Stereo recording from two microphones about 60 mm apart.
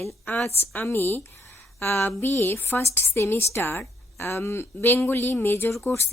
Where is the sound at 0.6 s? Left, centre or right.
Left.